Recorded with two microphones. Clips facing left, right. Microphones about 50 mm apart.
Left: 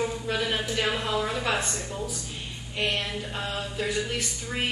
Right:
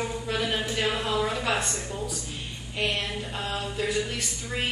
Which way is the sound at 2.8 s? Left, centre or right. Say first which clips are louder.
Even; centre.